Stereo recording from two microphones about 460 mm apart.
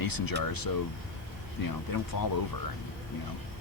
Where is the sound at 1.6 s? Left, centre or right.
Left.